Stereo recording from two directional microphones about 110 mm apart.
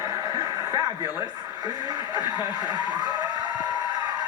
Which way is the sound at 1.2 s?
40° right (ahead or behind).